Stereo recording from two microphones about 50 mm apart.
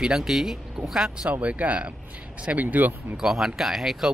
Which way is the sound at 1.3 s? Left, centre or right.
Right.